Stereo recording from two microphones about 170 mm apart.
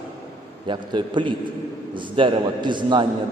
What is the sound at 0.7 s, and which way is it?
A man's voice, 30° right (ahead or behind).